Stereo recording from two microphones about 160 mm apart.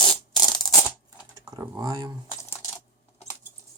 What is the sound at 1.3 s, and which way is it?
Speech, 25° right (ahead or behind).